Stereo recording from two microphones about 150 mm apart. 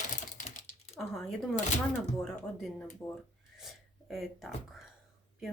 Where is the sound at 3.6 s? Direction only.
Centre (ahead or behind).